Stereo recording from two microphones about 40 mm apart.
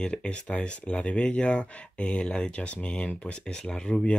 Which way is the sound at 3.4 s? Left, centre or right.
Centre.